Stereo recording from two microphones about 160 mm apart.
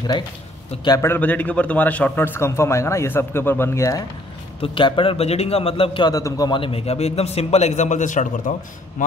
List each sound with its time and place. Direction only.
0.8 s a man's voice: 20° left (ahead or behind)
4.6 s a man's voice: 30° left (ahead or behind); by 8.5 s 50° left (ahead or behind)